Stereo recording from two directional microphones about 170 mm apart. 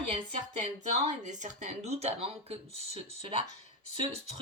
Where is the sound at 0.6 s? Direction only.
45° right (ahead or behind).